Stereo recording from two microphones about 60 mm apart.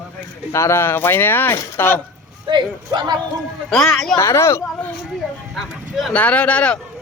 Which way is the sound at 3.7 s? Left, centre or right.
Centre.